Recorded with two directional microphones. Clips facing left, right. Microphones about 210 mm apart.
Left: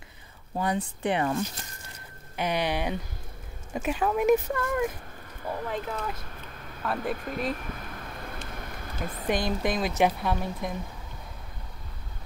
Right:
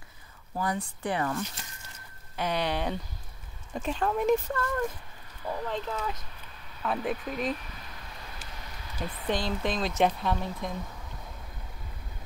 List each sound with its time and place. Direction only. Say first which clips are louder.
0.6 s speech: left 3 dB; 20° left (ahead or behind); by 7.3 s centre (ahead or behind)
7.5 s vehicle: left 5 dB; 55° left (ahead or behind)
8.5 s a sound: left 6 dB; 55° left (ahead or behind)
9.3 s speech: left 3 dB; 15° left (ahead or behind)